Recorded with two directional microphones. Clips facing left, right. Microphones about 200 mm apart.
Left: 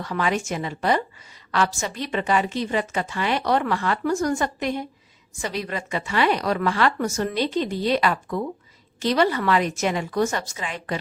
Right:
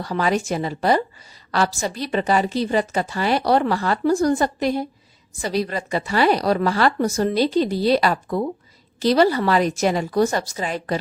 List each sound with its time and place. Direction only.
0.0 s a woman's voice: 35° right (ahead or behind)